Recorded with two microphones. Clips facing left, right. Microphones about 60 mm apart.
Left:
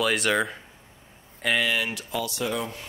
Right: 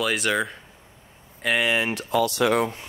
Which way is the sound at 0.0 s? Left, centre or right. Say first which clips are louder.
Even; centre.